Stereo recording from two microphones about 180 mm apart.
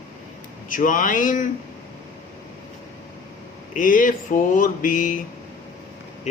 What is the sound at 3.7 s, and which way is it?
A man's voice, 45° left (ahead or behind).